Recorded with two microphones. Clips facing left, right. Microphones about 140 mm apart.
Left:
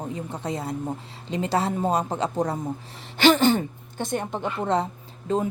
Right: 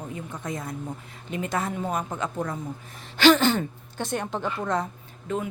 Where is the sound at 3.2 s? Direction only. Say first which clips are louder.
Left 1 dB; 15° left (ahead or behind); by 5.5 s 30° left (ahead or behind).